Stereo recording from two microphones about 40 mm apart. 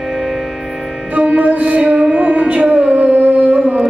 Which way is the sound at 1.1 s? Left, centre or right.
Right.